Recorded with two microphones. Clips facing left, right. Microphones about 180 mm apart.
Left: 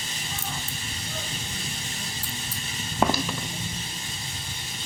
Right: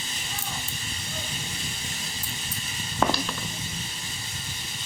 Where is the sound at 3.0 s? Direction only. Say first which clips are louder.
Left 1 dB; 10° left (ahead or behind).